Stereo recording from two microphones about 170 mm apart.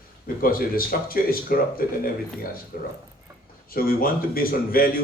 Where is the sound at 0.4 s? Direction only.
60° left (ahead or behind).